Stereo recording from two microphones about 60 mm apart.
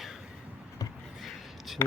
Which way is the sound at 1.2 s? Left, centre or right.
Centre.